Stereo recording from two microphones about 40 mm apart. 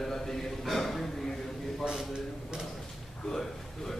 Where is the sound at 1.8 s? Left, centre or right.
Centre.